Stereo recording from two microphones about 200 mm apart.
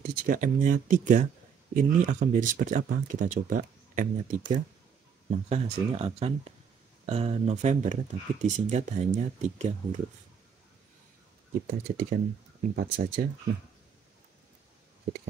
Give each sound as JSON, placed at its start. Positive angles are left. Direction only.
{"t": 0.1, "sound": "speech", "side_deg": -45}
{"t": 11.6, "sound": "speech", "side_deg": -50}